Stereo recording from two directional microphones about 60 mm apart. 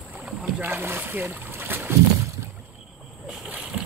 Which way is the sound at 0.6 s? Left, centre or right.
Right.